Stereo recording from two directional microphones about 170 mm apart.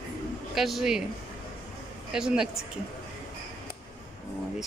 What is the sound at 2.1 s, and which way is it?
Speech, 5° right (ahead or behind).